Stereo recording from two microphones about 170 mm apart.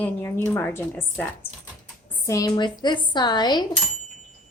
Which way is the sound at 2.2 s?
20° left (ahead or behind).